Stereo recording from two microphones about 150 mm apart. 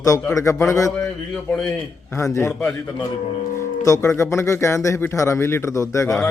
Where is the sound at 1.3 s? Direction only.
5° left (ahead or behind).